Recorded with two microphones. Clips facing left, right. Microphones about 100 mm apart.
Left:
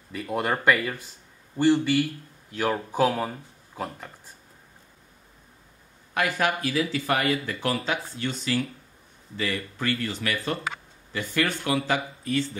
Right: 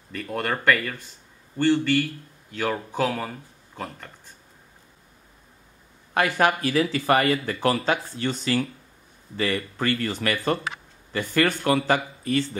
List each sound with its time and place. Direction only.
0.1 s speech: 10° left (ahead or behind)
6.1 s speech: 40° right (ahead or behind)